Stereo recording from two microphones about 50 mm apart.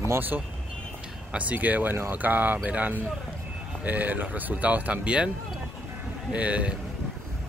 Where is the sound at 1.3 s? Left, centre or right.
Right.